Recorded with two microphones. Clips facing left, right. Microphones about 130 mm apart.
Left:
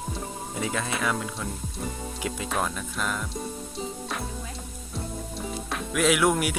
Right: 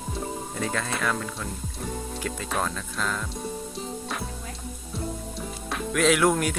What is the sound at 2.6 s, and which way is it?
Speech, 15° left (ahead or behind).